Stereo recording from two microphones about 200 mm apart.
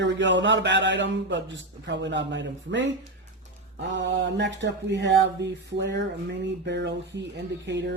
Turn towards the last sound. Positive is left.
turn(degrees=-60)  # may be behind; listen again after turning